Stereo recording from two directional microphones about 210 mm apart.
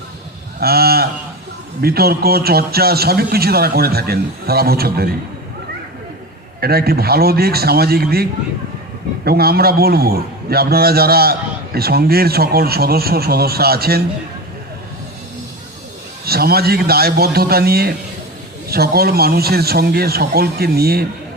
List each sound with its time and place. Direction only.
0.6 s a man's voice: 45° right (ahead or behind)
6.6 s a man's voice: 45° right (ahead or behind)
16.2 s a man's voice: 45° right (ahead or behind)